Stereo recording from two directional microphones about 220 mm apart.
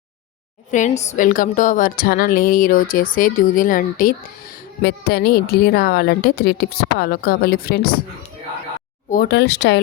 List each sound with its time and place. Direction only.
0.7 s a woman's voice: 35° left (ahead or behind)
9.0 s a woman's voice: 45° left (ahead or behind)